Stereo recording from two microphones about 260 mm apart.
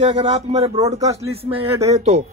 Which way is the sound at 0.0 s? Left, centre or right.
Right.